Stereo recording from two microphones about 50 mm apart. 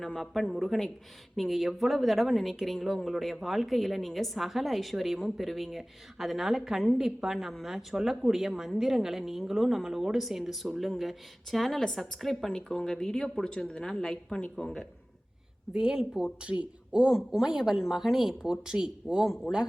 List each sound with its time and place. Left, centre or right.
0.0 s a woman's voice: centre
15.7 s speech: centre
16.4 s speech: right
17.1 s a woman's voice: centre
19.5 s a woman's voice: centre